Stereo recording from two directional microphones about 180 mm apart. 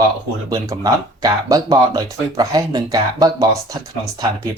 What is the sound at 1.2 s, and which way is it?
Speech, 20° right (ahead or behind).